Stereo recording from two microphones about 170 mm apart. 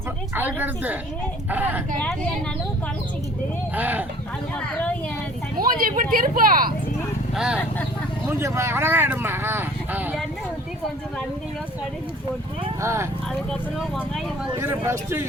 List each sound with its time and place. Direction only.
0.3 s speech: 10° right (ahead or behind)
3.8 s speech: 10° right (ahead or behind)
5.5 s speech: 55° right (ahead or behind)
7.3 s speech: 5° right (ahead or behind)
8.3 s speech: 15° right (ahead or behind)
12.8 s speech: 15° right (ahead or behind)
14.6 s speech: 15° right (ahead or behind)